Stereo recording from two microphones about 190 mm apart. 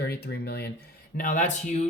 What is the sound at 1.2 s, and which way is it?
Speech, 45° left (ahead or behind).